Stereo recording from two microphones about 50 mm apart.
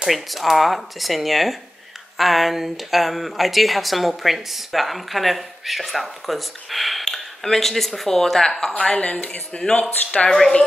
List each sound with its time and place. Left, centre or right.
0.0 s speech: centre
8.7 s speech: left